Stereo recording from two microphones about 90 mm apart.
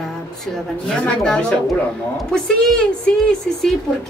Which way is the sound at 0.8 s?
10° left (ahead or behind).